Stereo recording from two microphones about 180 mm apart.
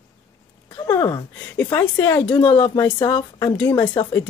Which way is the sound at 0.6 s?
15° left (ahead or behind).